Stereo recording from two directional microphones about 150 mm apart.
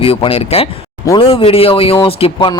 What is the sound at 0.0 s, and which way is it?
Speech, 40° left (ahead or behind).